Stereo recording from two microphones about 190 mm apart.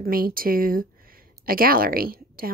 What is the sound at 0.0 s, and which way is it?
Speech, 50° right (ahead or behind).